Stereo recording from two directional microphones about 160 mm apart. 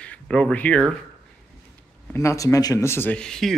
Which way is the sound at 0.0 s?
5° left (ahead or behind).